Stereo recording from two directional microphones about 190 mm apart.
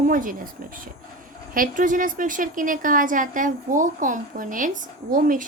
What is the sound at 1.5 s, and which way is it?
A woman's voice, 45° right (ahead or behind).